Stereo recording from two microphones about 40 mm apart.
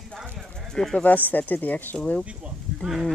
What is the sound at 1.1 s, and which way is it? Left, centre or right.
Speech, left.